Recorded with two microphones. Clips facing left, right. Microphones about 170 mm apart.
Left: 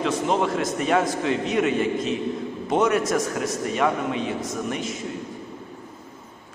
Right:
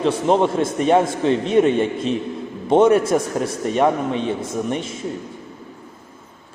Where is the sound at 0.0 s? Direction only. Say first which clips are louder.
Right 5 dB; 30° right (ahead or behind).